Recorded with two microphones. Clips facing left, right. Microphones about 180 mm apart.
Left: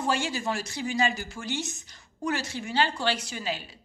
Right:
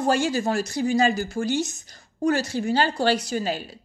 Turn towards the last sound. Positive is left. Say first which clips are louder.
# right 7 dB
turn(degrees=-40)  # may be behind; listen again after turning